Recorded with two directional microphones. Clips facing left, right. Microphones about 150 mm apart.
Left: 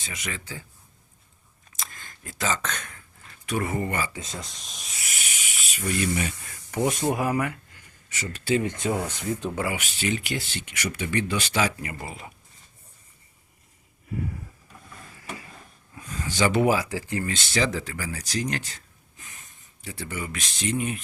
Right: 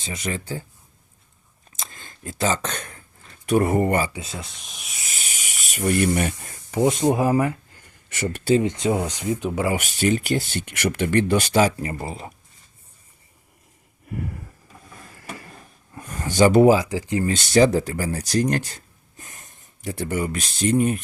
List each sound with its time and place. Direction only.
0.0 s speech: 30° right (ahead or behind)
1.8 s a sound: 25° right (ahead or behind)
3.5 s speech: 45° right (ahead or behind)
4.4 s speech: 5° right (ahead or behind)
4.9 s cricket: 30° right (ahead or behind)
5.4 s snake: 45° right (ahead or behind)
6.7 s speech: 20° right (ahead or behind)
8.1 s speech: 60° right (ahead or behind)
8.6 s speech: 20° right (ahead or behind)
9.7 s speech: 45° right (ahead or behind)
16.0 s a sound: 55° right (ahead or behind); by 16.7 s 40° right (ahead or behind)
16.7 s speech: 20° right (ahead or behind)
17.2 s speech: 45° right (ahead or behind)